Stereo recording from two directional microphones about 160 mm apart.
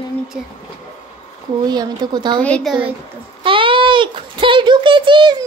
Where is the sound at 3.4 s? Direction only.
35° right (ahead or behind).